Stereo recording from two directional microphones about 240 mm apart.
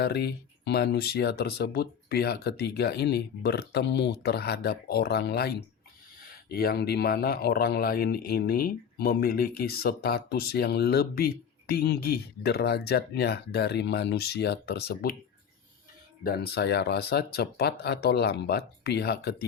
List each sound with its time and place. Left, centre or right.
0.0 s speech: left
16.2 s speech: left